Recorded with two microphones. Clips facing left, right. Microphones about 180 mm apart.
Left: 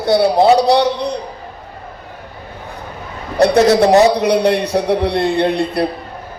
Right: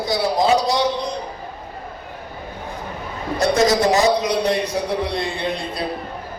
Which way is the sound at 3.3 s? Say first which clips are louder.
Left 6 dB; 65° left (ahead or behind).